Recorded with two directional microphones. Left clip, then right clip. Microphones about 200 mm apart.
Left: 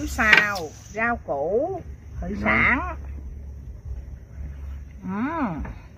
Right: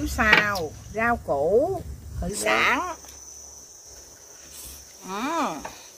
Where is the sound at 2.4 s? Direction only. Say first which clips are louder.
Left 1 dB; 30° right (ahead or behind).